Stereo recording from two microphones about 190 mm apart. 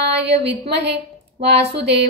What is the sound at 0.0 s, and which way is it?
A woman's voice, 60° right (ahead or behind).